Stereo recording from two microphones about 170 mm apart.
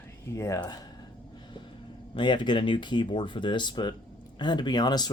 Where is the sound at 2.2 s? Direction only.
25° left (ahead or behind).